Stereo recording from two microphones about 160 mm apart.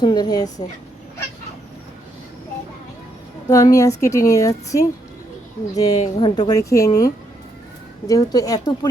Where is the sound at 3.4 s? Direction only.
20° left (ahead or behind).